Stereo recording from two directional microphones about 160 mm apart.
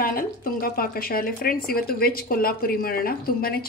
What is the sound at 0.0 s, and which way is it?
Speech, 65° left (ahead or behind).